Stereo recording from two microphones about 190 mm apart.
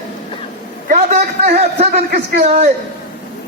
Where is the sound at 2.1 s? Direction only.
55° right (ahead or behind).